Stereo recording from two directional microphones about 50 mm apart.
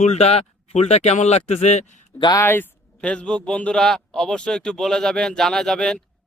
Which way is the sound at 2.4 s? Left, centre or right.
Left.